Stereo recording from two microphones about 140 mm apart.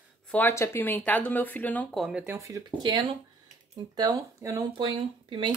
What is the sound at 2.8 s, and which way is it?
A woman's voice, 35° right (ahead or behind).